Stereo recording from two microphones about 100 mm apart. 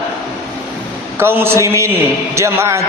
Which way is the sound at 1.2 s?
25° right (ahead or behind).